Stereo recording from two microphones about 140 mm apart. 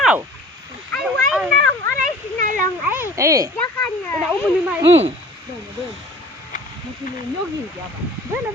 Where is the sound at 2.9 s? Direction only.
20° right (ahead or behind).